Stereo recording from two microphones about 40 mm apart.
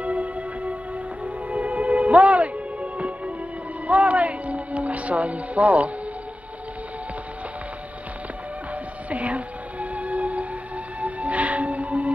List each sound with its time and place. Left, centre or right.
0.0 s music: right
9.1 s music: right